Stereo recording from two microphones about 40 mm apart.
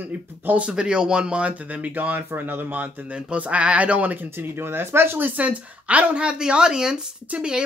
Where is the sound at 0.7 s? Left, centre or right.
Right.